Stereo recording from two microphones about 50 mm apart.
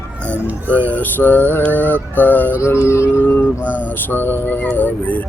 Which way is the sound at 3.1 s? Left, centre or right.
Left.